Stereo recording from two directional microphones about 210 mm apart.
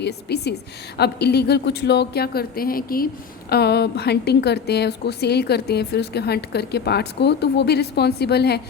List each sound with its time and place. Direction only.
0.0 s a woman's voice: 50° left (ahead or behind)